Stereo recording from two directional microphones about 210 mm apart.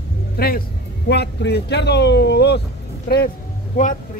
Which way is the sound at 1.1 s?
50° left (ahead or behind).